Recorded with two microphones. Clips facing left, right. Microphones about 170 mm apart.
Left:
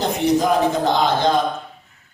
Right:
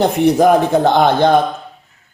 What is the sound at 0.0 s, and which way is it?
A man's voice, 60° right (ahead or behind).